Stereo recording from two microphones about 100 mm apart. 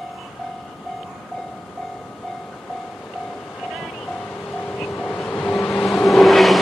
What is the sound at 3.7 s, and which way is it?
Music, 10° left (ahead or behind).